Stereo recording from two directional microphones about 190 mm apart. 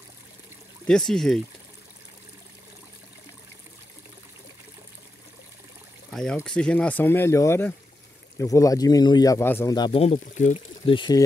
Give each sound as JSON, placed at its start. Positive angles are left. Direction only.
{"t": 0.8, "sound": "speech", "side_deg": 5}
{"t": 6.0, "sound": "speech", "side_deg": 0}
{"t": 9.8, "sound": "speech", "side_deg": 30}
{"t": 10.9, "sound": "speech", "side_deg": 25}